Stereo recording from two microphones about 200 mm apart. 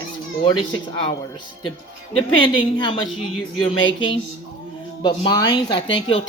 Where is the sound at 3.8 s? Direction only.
25° left (ahead or behind).